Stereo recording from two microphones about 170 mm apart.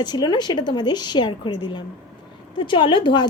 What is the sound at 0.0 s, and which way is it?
Speech, 25° left (ahead or behind).